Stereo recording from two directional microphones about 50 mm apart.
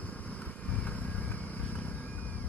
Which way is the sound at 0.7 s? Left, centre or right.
Left.